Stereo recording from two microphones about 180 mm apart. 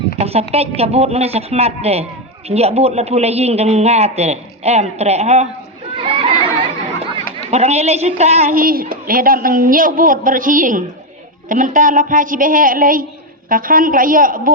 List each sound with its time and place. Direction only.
0.2 s a woman's voice: 35° right (ahead or behind)
6.0 s a sound: 30° right (ahead or behind)
7.5 s a man's voice: 35° right (ahead or behind)
8.5 s a woman's voice: 55° right (ahead or behind)